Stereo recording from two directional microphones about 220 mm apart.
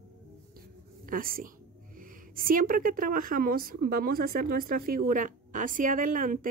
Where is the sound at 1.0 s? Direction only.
40° right (ahead or behind).